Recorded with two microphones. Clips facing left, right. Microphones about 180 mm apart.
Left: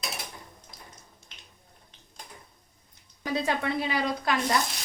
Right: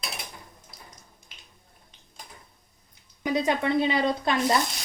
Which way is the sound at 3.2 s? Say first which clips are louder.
Right 4 dB; 20° right (ahead or behind).